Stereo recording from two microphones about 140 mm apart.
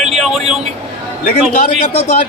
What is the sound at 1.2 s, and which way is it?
Speech, 75° left (ahead or behind).